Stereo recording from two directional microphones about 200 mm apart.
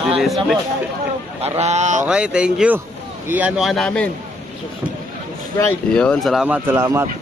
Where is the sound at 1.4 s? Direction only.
35° right (ahead or behind).